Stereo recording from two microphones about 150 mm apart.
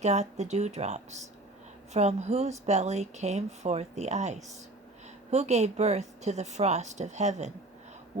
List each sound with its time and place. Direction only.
0.0 s speech: 50° right (ahead or behind)